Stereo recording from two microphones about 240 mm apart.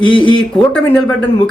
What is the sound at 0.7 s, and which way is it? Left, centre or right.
Speech, centre.